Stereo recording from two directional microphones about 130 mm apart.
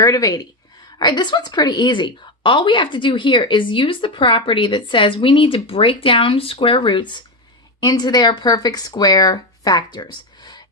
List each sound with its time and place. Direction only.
0.0 s a woman's voice: 25° left (ahead or behind)